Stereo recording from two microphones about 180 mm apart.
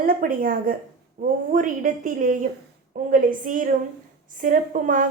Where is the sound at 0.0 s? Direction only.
50° right (ahead or behind).